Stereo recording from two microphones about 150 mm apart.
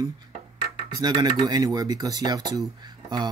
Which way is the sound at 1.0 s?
30° right (ahead or behind).